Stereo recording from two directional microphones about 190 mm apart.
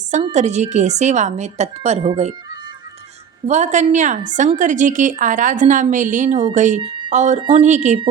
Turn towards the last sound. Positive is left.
turn(degrees=-40)  # may be behind; listen again after turning